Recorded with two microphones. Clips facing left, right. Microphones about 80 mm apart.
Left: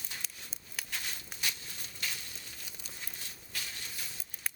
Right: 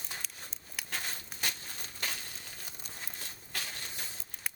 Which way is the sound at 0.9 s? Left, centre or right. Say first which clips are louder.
Right 4 dB; right.